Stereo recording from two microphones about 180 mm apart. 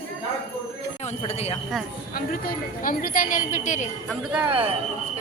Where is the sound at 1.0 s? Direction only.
40° left (ahead or behind).